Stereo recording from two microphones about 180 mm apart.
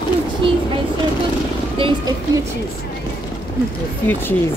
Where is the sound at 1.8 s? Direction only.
20° right (ahead or behind).